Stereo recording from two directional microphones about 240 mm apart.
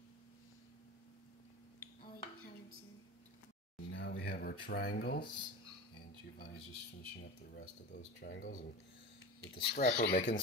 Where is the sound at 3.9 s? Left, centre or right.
Left.